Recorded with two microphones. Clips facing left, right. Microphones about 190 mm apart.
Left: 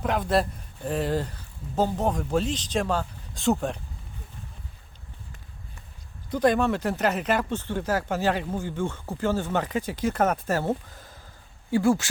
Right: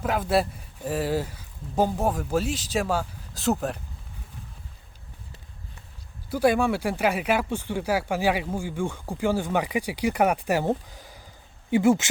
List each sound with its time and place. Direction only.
0.0 s speech: 5° right (ahead or behind)
6.3 s speech: 10° right (ahead or behind)